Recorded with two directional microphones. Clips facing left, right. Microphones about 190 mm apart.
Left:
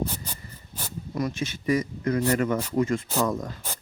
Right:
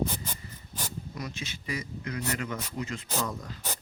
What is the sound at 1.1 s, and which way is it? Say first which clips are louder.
Speech: left 10 dB; 50° left (ahead or behind).